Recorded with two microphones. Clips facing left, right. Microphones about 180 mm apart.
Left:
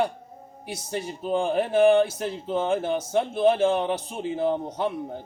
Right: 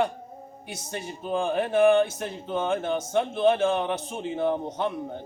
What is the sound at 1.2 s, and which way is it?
A man's voice, 10° left (ahead or behind).